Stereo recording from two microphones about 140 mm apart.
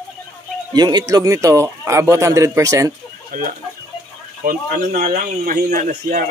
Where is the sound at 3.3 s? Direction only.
90° right.